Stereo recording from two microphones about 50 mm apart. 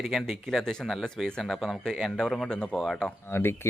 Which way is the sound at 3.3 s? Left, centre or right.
Left.